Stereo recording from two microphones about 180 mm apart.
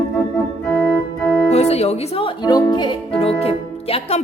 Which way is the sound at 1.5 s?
35° left (ahead or behind).